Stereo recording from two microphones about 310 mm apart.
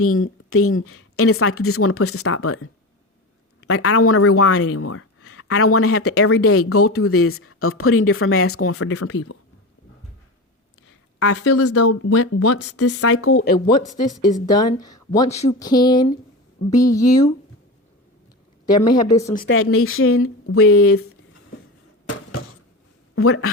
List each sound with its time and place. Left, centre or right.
0.0 s speech: left
3.7 s speech: left
11.2 s speech: left
14.4 s a woman's voice: centre
18.6 s a woman's voice: centre
19.5 s speech: left
23.1 s speech: left